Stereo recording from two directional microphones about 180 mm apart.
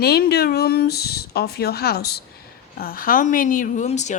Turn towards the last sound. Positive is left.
turn(degrees=40)  # may be behind; listen again after turning